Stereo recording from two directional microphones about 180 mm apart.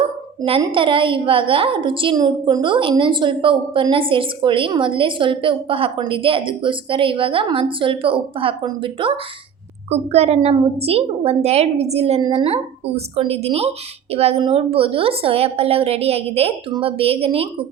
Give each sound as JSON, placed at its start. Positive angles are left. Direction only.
{"t": 0.6, "sound": "a woman's voice", "side_deg": -30}